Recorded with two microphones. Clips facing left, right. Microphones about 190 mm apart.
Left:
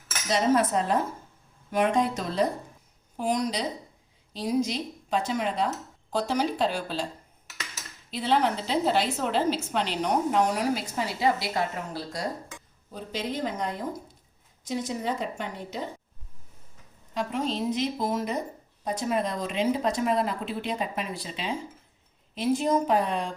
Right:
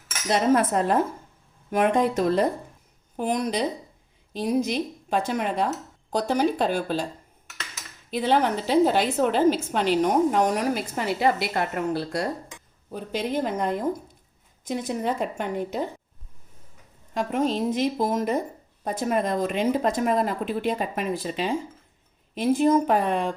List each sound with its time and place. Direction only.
0.3 s a woman's voice: 55° right (ahead or behind)
8.1 s a woman's voice: 50° right (ahead or behind)
17.2 s a woman's voice: 50° right (ahead or behind)